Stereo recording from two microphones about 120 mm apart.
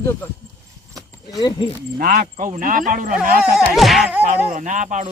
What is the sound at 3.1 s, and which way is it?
Speech, 5° right (ahead or behind).